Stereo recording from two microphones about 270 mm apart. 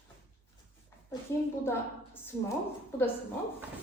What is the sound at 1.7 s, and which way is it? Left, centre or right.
Speech, centre.